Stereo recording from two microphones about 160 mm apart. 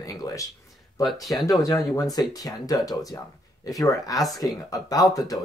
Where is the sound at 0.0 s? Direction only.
20° left (ahead or behind).